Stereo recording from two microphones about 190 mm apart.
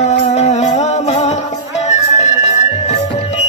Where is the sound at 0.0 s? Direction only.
35° left (ahead or behind).